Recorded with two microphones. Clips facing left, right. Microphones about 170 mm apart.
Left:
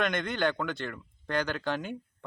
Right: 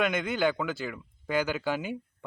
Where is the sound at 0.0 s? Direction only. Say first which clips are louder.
Right 2 dB; 5° right (ahead or behind).